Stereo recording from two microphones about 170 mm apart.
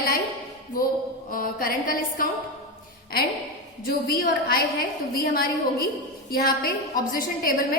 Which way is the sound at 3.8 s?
60° left (ahead or behind).